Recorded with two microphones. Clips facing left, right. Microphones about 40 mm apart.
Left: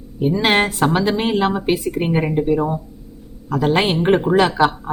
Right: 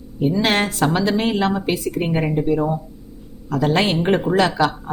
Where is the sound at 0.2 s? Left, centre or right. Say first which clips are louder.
Left 2 dB; centre.